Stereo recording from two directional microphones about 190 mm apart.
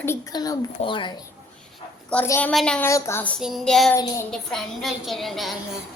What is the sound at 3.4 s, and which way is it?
A woman's voice, centre (ahead or behind).